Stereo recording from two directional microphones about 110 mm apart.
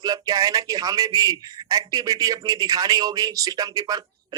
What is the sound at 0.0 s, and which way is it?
A man's voice, 35° right (ahead or behind).